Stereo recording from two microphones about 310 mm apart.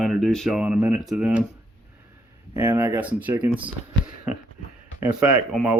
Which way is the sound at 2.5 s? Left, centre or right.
Centre.